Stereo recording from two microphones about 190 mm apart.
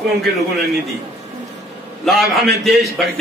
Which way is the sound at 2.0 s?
Centre (ahead or behind).